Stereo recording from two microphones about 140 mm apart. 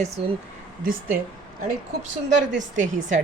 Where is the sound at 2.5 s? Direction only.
65° right (ahead or behind).